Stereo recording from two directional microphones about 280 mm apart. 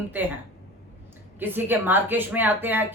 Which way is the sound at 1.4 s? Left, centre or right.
Centre.